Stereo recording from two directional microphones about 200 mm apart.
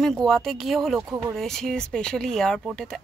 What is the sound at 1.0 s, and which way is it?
Speech, 15° right (ahead or behind).